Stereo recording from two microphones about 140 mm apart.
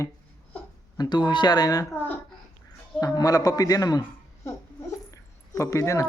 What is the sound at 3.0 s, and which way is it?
Speech, 25° left (ahead or behind).